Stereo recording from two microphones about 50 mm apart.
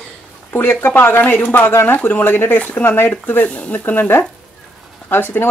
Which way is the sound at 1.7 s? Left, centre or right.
Left.